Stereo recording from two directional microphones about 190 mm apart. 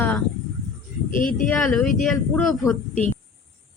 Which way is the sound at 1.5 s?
5° left (ahead or behind).